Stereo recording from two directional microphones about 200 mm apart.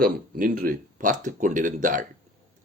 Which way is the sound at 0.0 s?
45° right (ahead or behind).